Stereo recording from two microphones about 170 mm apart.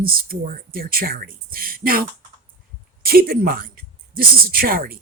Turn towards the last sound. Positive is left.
turn(degrees=-60)  # may be behind; listen again after turning